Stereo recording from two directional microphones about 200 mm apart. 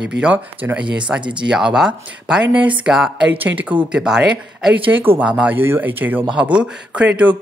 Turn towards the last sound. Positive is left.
turn(degrees=-5)  # may be behind; listen again after turning